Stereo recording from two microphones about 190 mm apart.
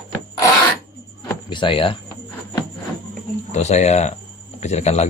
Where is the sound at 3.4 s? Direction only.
35° left (ahead or behind).